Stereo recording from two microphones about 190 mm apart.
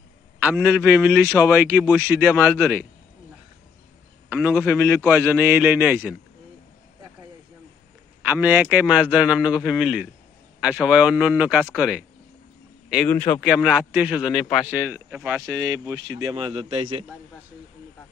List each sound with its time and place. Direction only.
0.4 s a man's voice: 5° right (ahead or behind)
4.3 s a man's voice: 10° right (ahead or behind)
8.3 s a man's voice: 10° right (ahead or behind)
13.1 s speech: 10° left (ahead or behind)
13.4 s a man's voice: 5° right (ahead or behind)
15.5 s a man's voice: 15° right (ahead or behind)